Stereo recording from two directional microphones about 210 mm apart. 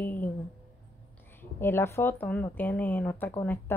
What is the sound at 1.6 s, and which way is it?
A woman's voice, 10° left (ahead or behind).